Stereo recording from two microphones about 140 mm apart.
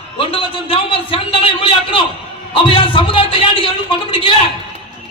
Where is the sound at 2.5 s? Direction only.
40° left (ahead or behind).